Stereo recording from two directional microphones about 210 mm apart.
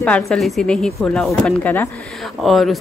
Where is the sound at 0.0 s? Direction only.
5° left (ahead or behind).